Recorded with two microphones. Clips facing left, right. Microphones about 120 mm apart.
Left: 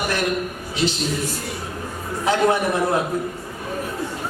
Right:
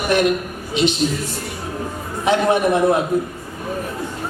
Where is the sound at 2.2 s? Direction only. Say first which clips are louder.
Right 3 dB; 20° right (ahead or behind).